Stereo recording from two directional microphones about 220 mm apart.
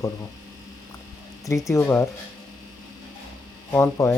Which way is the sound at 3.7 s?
10° left (ahead or behind).